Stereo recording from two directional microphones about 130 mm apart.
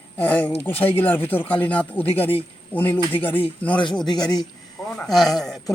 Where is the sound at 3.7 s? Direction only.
40° left (ahead or behind).